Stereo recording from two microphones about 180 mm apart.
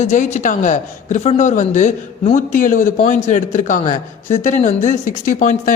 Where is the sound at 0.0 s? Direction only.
40° left (ahead or behind).